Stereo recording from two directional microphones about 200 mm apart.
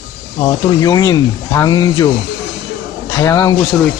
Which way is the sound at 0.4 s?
20° left (ahead or behind).